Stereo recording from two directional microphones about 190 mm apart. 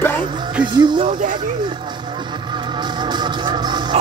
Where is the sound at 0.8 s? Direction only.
25° right (ahead or behind).